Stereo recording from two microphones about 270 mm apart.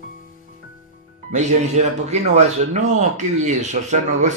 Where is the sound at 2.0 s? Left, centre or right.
Right.